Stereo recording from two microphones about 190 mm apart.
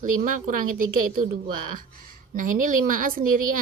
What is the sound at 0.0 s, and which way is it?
Speech, 40° right (ahead or behind).